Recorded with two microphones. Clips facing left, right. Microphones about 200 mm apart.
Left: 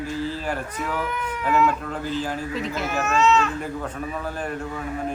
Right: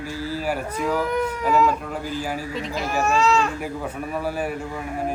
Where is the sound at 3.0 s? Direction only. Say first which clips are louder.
Even; 35° right (ahead or behind).